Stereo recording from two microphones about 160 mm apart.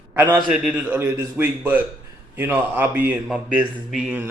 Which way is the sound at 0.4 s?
5° right (ahead or behind).